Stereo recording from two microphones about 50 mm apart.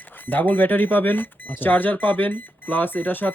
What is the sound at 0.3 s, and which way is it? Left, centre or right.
Speech, left.